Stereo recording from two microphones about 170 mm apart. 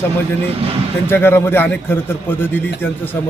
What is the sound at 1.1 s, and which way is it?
A man's voice, 15° left (ahead or behind).